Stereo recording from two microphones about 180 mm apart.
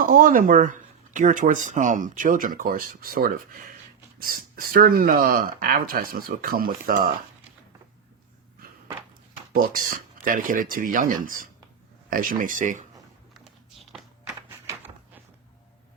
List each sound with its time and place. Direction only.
0.0 s speech: 50° right (ahead or behind)
9.5 s speech: 50° right (ahead or behind)